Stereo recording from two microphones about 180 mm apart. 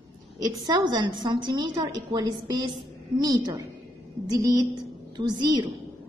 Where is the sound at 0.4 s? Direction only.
20° right (ahead or behind).